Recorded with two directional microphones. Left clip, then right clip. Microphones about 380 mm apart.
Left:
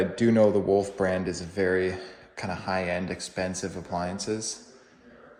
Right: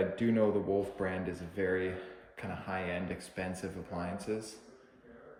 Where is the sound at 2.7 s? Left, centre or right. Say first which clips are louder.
Left 7 dB; left.